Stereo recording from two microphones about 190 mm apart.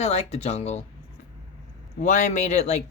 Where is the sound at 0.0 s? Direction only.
35° left (ahead or behind).